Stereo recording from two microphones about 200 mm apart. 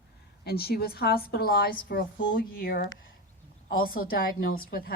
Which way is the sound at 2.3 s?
45° left (ahead or behind).